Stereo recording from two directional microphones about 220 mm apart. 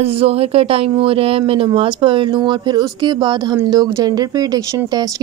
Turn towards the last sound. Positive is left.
turn(degrees=-15)  # may be behind; listen again after turning